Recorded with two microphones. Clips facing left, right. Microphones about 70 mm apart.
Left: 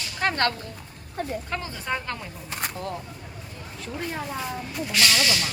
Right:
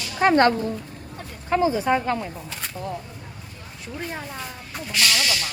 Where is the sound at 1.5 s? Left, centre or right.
Centre.